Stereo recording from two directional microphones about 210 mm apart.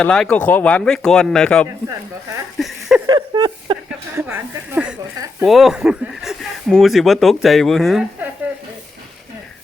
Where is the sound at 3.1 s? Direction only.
20° right (ahead or behind).